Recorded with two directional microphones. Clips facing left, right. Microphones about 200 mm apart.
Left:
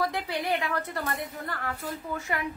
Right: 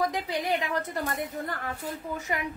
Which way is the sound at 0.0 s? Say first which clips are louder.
Right 1 dB; 15° right (ahead or behind).